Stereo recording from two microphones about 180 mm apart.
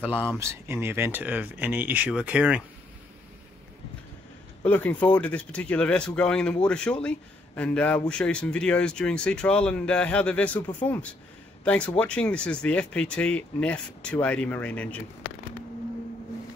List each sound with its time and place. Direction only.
0.0 s speech: 10° right (ahead or behind)
4.6 s speech: 10° left (ahead or behind)